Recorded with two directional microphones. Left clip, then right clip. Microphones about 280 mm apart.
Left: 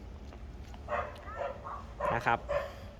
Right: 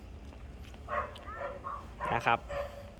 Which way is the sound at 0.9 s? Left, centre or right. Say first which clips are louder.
Even; left.